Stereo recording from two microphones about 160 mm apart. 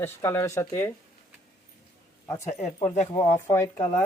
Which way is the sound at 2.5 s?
45° left (ahead or behind).